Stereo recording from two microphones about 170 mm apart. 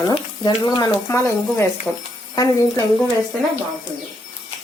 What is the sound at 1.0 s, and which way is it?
Speech, 15° left (ahead or behind).